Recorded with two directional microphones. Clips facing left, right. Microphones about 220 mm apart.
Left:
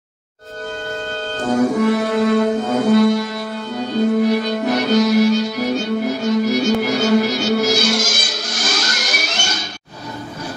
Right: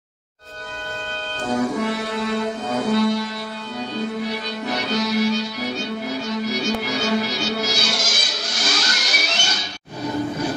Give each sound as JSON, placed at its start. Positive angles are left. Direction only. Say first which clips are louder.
{"t": 1.4, "sound": "music", "louder": "left 6 dB", "side_deg": 45}